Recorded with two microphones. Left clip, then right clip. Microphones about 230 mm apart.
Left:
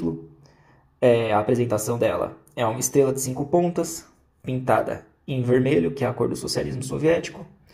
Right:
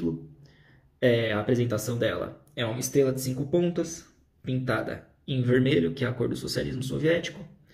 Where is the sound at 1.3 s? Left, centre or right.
Centre.